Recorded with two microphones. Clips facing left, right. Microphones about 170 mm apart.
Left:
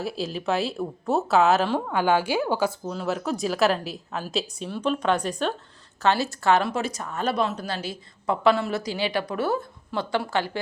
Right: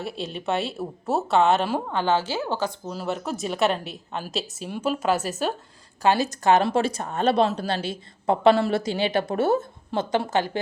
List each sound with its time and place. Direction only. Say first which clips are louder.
0.0 s speech: left 2 dB; centre (ahead or behind)
1.9 s a woman's voice: left 2 dB; 10° left (ahead or behind)
2.8 s speech: left 1 dB; 5° right (ahead or behind)